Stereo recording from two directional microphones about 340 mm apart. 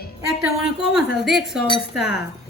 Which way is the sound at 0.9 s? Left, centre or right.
Centre.